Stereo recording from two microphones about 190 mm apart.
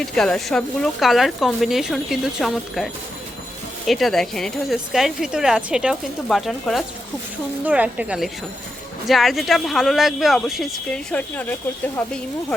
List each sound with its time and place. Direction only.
0.0 s a woman's voice: 5° left (ahead or behind)